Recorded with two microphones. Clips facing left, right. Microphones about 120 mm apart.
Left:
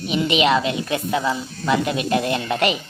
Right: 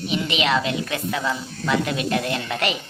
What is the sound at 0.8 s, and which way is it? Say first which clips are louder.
Speech: left 4 dB; 30° left (ahead or behind).